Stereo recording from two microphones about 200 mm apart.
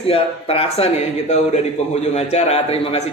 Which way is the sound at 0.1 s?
30° left (ahead or behind).